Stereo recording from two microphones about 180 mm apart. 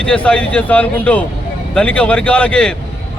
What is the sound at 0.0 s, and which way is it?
A man's voice, 5° left (ahead or behind).